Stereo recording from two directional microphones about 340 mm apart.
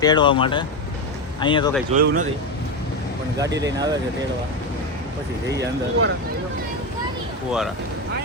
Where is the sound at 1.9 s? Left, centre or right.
Right.